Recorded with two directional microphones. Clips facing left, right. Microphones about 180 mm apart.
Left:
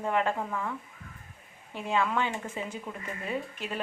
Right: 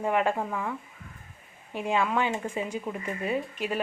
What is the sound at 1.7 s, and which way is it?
Speech, 15° right (ahead or behind).